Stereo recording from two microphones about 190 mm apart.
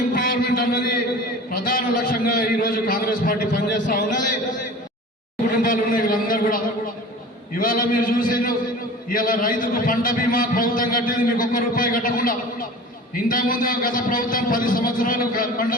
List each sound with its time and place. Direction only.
0.1 s a man's voice: 50° left (ahead or behind)
5.5 s a man's voice: 45° left (ahead or behind)
7.6 s a man's voice: 45° left (ahead or behind)